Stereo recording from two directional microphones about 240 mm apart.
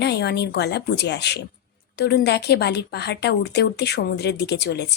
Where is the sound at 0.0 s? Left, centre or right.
Left.